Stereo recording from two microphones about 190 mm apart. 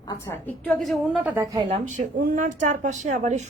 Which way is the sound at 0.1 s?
10° left (ahead or behind).